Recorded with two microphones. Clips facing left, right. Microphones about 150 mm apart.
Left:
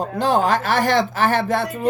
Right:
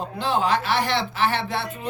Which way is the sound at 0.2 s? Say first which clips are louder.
Left 4 dB; 45° left (ahead or behind).